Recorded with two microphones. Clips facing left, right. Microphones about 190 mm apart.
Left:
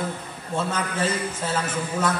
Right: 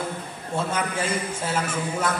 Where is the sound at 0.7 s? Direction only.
10° right (ahead or behind).